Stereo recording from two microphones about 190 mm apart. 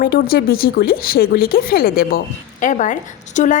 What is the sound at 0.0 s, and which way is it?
Speech, 50° left (ahead or behind).